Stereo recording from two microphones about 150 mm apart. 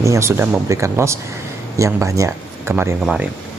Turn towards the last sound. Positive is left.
turn(degrees=-5)  # may be behind; listen again after turning